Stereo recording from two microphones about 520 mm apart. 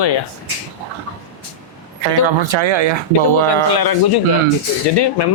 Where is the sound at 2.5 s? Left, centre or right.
Right.